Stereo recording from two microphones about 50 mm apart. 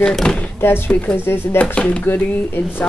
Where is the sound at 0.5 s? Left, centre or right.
Left.